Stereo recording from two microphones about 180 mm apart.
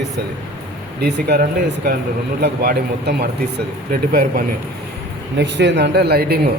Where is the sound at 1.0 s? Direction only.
65° right (ahead or behind).